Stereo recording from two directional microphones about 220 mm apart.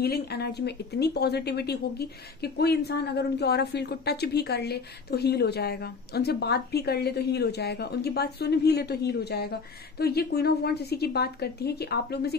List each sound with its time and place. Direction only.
0.0 s speech: 45° left (ahead or behind)